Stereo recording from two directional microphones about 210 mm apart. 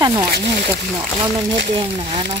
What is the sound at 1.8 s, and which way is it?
Speech, 20° right (ahead or behind).